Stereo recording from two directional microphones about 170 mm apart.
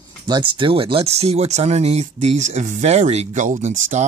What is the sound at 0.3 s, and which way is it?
Speech, 30° right (ahead or behind).